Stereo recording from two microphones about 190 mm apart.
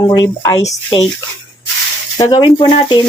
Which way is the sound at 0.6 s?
35° left (ahead or behind).